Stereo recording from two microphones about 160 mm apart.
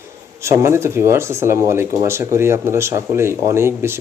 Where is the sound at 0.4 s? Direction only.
15° right (ahead or behind).